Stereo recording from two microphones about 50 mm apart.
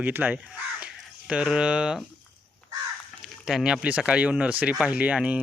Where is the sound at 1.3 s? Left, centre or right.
Centre.